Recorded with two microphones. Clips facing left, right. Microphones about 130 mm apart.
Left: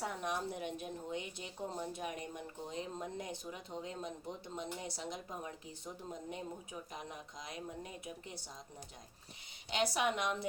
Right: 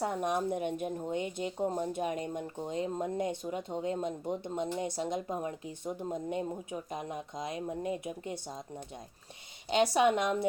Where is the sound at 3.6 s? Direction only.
55° right (ahead or behind).